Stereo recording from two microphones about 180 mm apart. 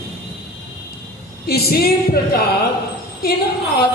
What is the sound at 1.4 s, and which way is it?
Speech, 60° left (ahead or behind).